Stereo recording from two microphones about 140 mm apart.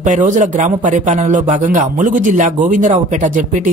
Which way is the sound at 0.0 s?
60° right (ahead or behind).